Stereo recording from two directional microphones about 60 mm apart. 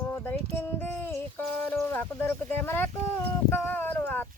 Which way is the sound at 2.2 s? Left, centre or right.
Left.